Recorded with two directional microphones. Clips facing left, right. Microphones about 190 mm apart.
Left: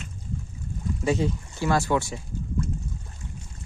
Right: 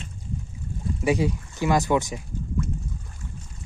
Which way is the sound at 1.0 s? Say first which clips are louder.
Right 2 dB; 15° right (ahead or behind).